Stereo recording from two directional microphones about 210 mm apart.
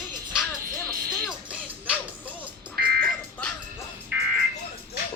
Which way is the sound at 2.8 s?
50° right (ahead or behind).